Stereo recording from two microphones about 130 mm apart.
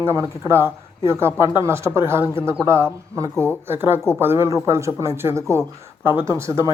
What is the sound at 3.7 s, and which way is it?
Speech, 15° right (ahead or behind).